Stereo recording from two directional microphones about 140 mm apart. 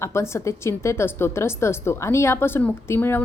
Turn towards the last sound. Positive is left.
turn(degrees=15)  # may be behind; listen again after turning